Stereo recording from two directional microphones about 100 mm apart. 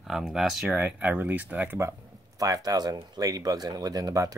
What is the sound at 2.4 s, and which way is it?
Speech, 35° right (ahead or behind).